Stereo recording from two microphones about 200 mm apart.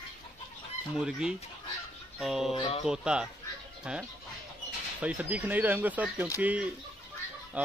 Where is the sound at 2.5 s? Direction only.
30° left (ahead or behind).